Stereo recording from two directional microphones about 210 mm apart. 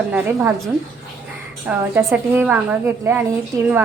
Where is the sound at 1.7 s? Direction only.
10° right (ahead or behind).